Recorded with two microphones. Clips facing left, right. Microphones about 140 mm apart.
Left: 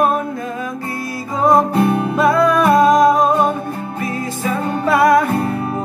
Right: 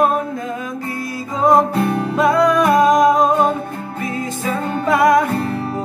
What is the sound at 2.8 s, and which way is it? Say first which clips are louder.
Humming: left 1 dB; 15° right (ahead or behind).